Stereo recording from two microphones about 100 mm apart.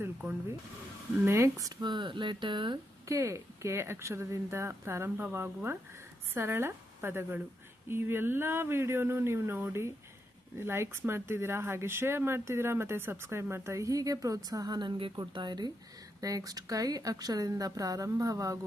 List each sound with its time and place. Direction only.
1.2 s speech: 25° right (ahead or behind); by 2.7 s 55° right (ahead or behind)
3.1 s speech: 30° right (ahead or behind)